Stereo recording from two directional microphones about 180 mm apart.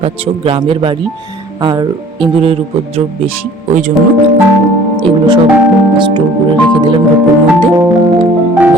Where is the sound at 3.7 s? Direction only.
45° right (ahead or behind).